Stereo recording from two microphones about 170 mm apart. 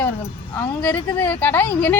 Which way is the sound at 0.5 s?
15° left (ahead or behind).